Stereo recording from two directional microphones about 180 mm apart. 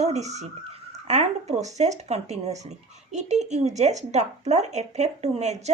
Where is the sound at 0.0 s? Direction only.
40° right (ahead or behind).